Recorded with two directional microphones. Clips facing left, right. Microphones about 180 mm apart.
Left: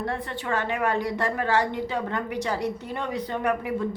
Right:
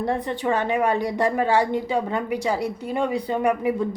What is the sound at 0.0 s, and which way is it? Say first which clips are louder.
A woman's voice: right 6 dB; 15° right (ahead or behind).